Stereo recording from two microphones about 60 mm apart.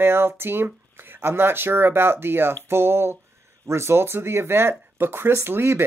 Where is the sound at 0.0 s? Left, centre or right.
Right.